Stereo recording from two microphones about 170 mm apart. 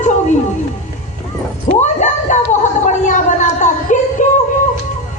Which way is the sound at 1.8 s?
45° left (ahead or behind).